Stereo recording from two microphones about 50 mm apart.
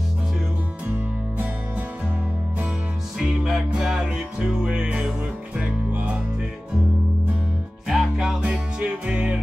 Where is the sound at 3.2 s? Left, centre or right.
Centre; by 6.0 s right.